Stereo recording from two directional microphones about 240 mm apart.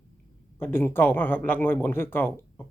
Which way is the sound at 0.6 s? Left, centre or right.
Centre.